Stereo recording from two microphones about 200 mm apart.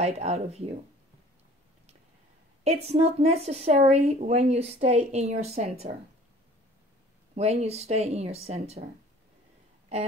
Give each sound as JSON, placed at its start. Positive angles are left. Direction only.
{"t": 0.0, "sound": "a woman's voice", "side_deg": -30}
{"t": 2.6, "sound": "a woman's voice", "side_deg": -30}
{"t": 7.3, "sound": "a woman's voice", "side_deg": -30}